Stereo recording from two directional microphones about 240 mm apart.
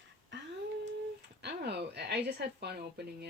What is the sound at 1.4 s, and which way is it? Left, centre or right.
Speech, right.